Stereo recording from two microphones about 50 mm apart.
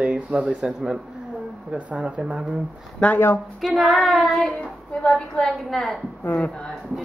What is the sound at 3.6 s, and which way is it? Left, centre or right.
Female singing, centre.